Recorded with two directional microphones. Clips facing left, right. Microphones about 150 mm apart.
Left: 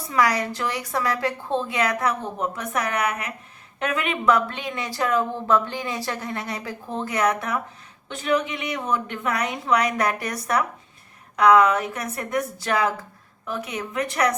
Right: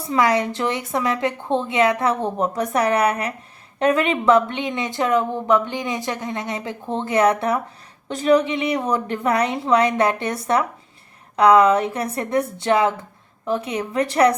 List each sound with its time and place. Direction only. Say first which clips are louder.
0.1 s speech: right 4 dB; 25° right (ahead or behind)